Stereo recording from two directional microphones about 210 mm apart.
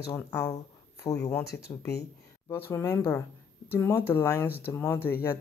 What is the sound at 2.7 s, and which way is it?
Speech, 10° left (ahead or behind).